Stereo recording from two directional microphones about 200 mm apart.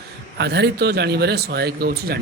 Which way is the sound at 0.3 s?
55° right (ahead or behind).